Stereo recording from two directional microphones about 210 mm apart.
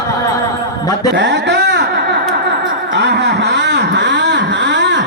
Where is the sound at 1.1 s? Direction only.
55° right (ahead or behind).